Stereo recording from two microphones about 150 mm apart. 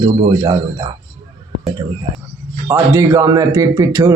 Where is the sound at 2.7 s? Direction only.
20° right (ahead or behind).